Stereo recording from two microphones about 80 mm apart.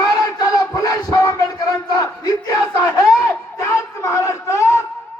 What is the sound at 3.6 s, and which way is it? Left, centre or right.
Speech, left.